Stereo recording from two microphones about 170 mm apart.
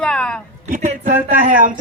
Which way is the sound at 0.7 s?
50° right (ahead or behind).